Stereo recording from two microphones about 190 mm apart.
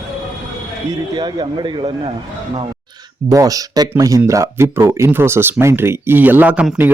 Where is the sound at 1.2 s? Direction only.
25° right (ahead or behind).